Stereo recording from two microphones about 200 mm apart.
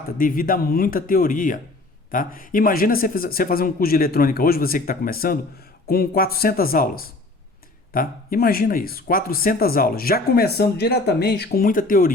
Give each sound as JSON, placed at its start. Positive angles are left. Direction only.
{"t": 0.2, "sound": "speech", "side_deg": 45}